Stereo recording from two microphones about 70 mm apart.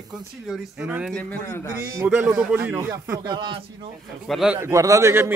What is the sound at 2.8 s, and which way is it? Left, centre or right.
Speech, right.